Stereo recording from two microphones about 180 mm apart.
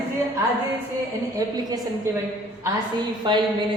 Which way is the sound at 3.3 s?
25° right (ahead or behind).